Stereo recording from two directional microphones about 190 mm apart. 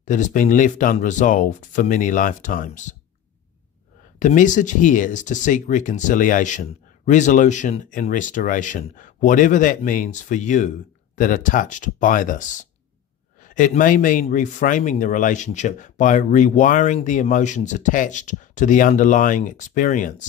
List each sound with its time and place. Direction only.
0.0 s a man's voice: 40° left (ahead or behind)
4.2 s a man's voice: 40° left (ahead or behind)